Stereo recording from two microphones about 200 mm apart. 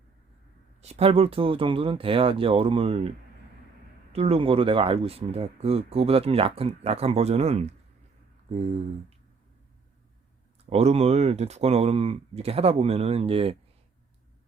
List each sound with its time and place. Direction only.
0.8 s speech: 30° right (ahead or behind)
4.1 s speech: 30° right (ahead or behind)
10.7 s speech: 30° right (ahead or behind)